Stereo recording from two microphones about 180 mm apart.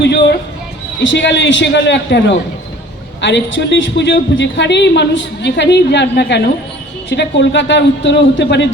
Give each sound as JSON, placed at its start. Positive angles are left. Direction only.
{"t": 0.0, "sound": "a man's voice", "side_deg": 80}